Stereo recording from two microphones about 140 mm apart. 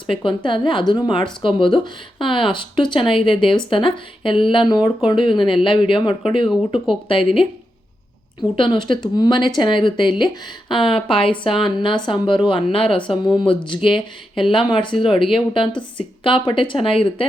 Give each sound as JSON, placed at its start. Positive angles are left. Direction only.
{"t": 0.1, "sound": "speech", "side_deg": 35}